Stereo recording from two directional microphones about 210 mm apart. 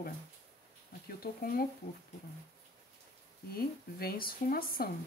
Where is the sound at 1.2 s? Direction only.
45° left (ahead or behind).